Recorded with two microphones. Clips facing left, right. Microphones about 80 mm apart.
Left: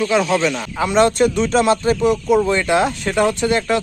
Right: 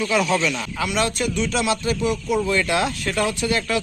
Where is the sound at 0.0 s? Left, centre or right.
Left.